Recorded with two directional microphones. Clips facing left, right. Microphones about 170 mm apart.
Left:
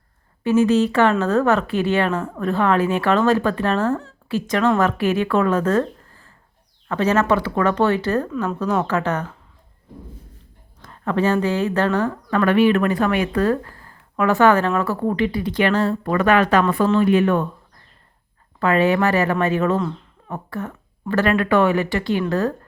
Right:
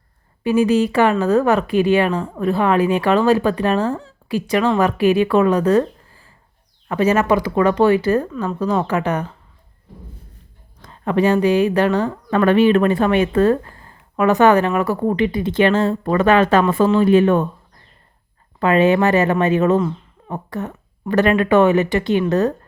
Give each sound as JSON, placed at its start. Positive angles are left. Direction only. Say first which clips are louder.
{"t": 0.4, "sound": "a woman's voice", "louder": "right 1 dB", "side_deg": -10}
{"t": 10.8, "sound": "a woman's voice", "louder": "right 3 dB", "side_deg": -15}
{"t": 12.3, "sound": "speech", "louder": "right 3 dB", "side_deg": -25}
{"t": 18.6, "sound": "speech", "louder": "right 3 dB", "side_deg": -20}
{"t": 19.8, "sound": "a sound", "louder": "right 3 dB", "side_deg": -5}
{"t": 20.3, "sound": "speech", "louder": "right 2 dB", "side_deg": -20}